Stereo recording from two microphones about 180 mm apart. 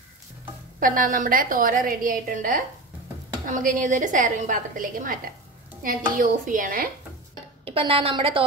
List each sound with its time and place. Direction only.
0.7 s a woman's voice: 50° right (ahead or behind)
7.6 s a woman's voice: 30° right (ahead or behind)